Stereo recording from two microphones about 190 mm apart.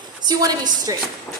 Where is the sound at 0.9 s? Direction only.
20° right (ahead or behind).